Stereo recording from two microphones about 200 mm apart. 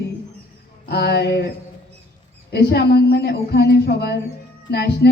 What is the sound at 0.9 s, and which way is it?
Speech, 55° left (ahead or behind).